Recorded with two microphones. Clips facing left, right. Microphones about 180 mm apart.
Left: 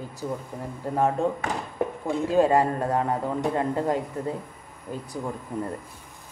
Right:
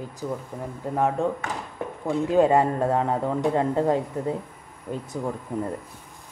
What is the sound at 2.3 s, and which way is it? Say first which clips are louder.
Speech: right 1 dB; 20° right (ahead or behind).